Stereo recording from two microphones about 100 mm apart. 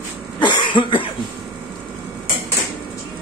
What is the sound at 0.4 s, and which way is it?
Cough, 50° left (ahead or behind).